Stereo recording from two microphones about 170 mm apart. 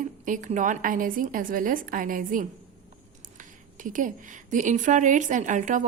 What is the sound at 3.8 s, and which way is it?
A woman's voice, 50° right (ahead or behind).